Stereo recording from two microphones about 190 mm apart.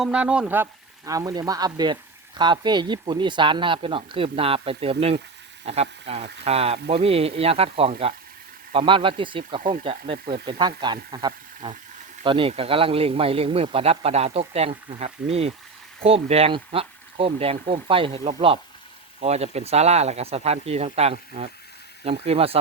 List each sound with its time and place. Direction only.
0.0 s speech: 5° right (ahead or behind); by 22.5 s 30° right (ahead or behind)